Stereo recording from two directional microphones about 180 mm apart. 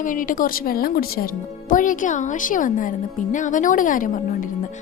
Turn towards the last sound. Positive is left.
turn(degrees=50)  # may be behind; listen again after turning